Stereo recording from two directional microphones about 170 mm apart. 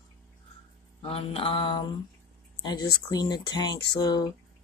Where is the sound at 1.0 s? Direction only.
35° left (ahead or behind).